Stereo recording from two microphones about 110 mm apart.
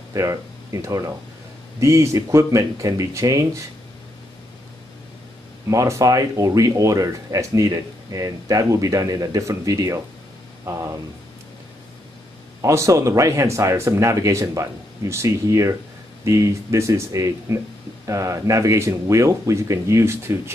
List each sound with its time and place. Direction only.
0.1 s speech: 30° right (ahead or behind)
5.7 s speech: 30° right (ahead or behind)
12.6 s speech: 25° right (ahead or behind)